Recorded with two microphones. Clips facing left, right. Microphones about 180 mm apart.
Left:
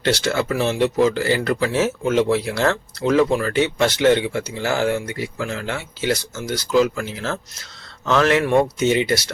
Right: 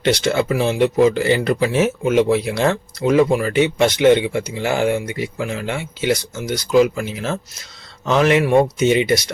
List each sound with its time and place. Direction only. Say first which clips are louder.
0.0 s speech: right 3 dB; 20° right (ahead or behind)